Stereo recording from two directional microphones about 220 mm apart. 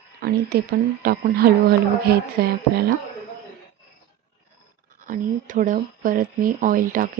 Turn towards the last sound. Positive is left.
turn(degrees=-40)  # may be behind; listen again after turning